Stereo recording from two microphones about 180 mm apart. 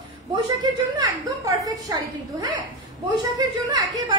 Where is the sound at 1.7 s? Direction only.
20° right (ahead or behind).